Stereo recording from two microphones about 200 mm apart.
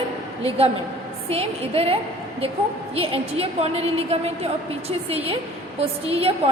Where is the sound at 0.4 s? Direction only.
30° right (ahead or behind).